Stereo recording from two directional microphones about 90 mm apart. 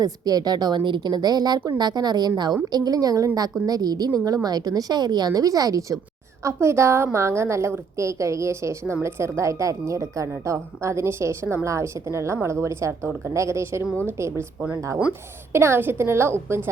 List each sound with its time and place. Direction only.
0.0 s a woman's voice: 45° right (ahead or behind)
6.4 s a woman's voice: 30° right (ahead or behind)
15.5 s a woman's voice: 30° right (ahead or behind)